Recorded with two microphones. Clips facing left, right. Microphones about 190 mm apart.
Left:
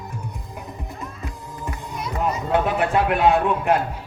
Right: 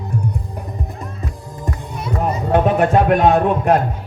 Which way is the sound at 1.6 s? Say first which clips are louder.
Right 4 dB; 35° right (ahead or behind).